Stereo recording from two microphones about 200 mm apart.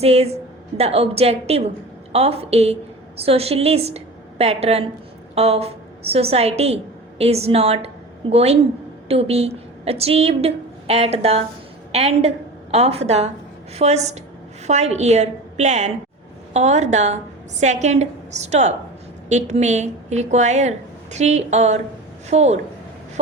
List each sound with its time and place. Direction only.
0.0 s a woman's voice: 30° right (ahead or behind)